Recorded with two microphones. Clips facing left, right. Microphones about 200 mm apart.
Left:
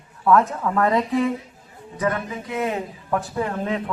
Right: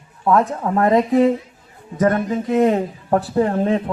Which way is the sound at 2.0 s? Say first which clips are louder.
Right 7 dB; 45° right (ahead or behind).